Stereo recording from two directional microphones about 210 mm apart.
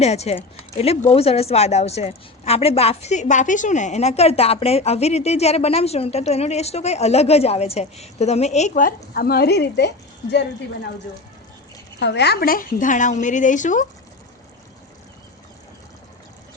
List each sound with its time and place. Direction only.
0.0 s speech: 30° left (ahead or behind); by 9.9 s 50° left (ahead or behind)
11.9 s speech: 55° left (ahead or behind); by 13.8 s 35° left (ahead or behind)